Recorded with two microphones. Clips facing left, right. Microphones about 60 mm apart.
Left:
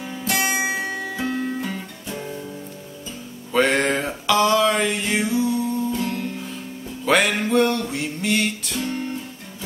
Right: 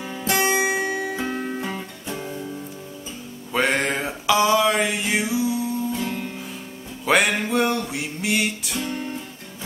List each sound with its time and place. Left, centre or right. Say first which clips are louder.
0.0 s music: right 2 dB; centre
3.5 s a sound: left 3 dB; centre
7.1 s music: left 1 dB; centre